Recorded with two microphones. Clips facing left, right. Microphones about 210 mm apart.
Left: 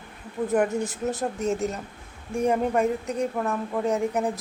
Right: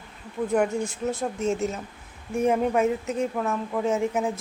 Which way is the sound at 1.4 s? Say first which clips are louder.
Right 1 dB; centre (ahead or behind).